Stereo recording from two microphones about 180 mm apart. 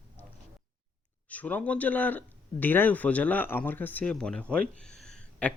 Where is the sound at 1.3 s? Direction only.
10° left (ahead or behind).